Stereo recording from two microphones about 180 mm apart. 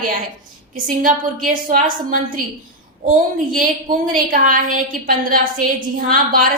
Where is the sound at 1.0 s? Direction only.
50° right (ahead or behind).